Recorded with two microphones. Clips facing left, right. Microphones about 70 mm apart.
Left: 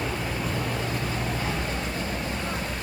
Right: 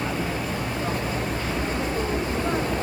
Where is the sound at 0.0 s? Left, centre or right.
Centre; by 2.7 s right.